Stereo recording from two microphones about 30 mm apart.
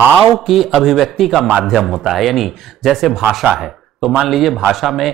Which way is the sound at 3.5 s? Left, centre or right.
Centre.